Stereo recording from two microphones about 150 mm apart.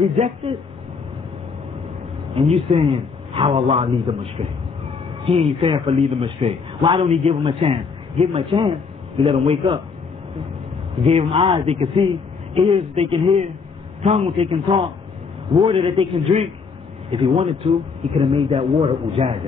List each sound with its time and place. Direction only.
0.0 s a man's voice: 35° right (ahead or behind)
2.7 s a man's voice: 35° right (ahead or behind)
11.1 s a man's voice: 30° right (ahead or behind)
11.6 s a man's voice: 40° right (ahead or behind)
11.9 s speech: 30° right (ahead or behind)
14.2 s a man's voice: 40° right (ahead or behind)